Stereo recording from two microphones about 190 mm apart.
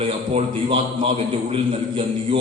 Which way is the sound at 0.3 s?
30° right (ahead or behind).